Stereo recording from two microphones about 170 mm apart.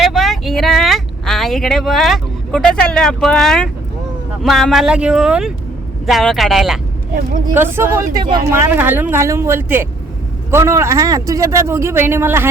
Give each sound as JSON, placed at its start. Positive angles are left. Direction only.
{"t": 0.0, "sound": "a sound", "side_deg": 0}
{"t": 4.4, "sound": "speech", "side_deg": 0}
{"t": 7.5, "sound": "a man's voice", "side_deg": -15}